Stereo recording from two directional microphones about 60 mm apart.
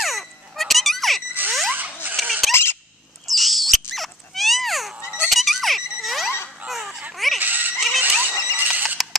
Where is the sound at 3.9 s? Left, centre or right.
Centre.